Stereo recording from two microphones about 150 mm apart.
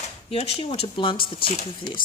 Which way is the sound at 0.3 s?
40° left (ahead or behind).